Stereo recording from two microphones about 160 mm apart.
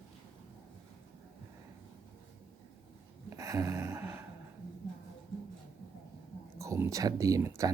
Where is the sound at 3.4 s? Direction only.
20° right (ahead or behind).